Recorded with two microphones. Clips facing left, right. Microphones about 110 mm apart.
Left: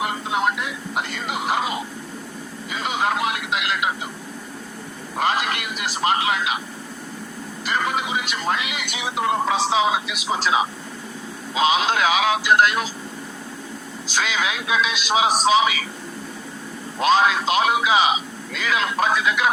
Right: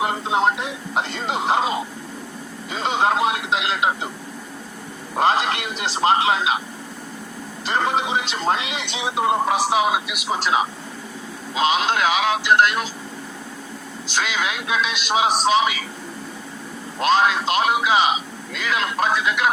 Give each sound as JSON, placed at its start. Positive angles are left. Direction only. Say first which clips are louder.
{"t": 0.0, "sound": "a man's voice", "louder": "right 3 dB", "side_deg": -30}
{"t": 5.1, "sound": "speech", "louder": "right 3 dB", "side_deg": -30}
{"t": 7.6, "sound": "a man's voice", "louder": "right 2 dB", "side_deg": -30}
{"t": 14.1, "sound": "a man's voice", "louder": "even", "side_deg": 0}
{"t": 17.0, "sound": "a man's voice", "louder": "even", "side_deg": 0}